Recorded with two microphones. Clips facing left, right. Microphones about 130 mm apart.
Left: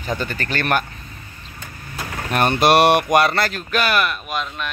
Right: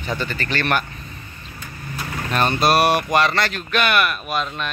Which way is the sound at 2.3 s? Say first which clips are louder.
Left 3 dB; 65° left (ahead or behind).